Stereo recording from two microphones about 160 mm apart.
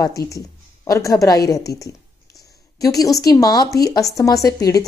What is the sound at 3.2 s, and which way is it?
Speech, 20° left (ahead or behind).